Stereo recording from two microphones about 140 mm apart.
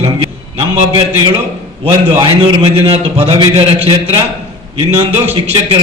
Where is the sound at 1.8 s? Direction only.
40° right (ahead or behind).